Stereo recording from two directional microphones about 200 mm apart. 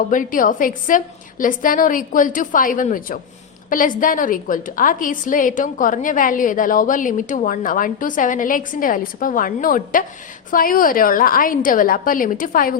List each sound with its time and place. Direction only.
0.1 s a woman's voice: 40° left (ahead or behind)